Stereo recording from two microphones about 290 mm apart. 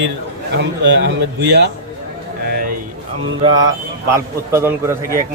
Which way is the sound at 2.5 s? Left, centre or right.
Right.